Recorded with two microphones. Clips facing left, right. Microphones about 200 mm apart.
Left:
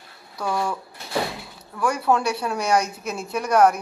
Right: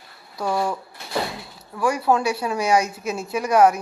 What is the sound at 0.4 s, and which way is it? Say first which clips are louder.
Speech: right 2 dB; 20° right (ahead or behind).